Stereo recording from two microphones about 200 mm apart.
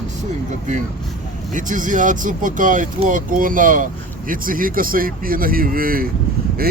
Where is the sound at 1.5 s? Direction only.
40° right (ahead or behind).